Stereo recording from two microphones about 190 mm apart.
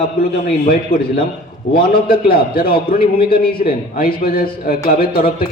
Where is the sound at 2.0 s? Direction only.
50° left (ahead or behind).